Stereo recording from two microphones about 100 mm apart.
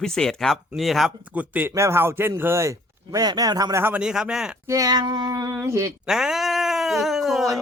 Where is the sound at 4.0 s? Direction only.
10° right (ahead or behind).